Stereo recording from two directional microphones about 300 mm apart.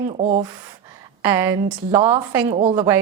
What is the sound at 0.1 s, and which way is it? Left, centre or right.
Speech, right.